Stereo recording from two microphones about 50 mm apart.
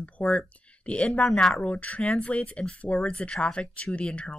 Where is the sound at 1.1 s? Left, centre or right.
Centre.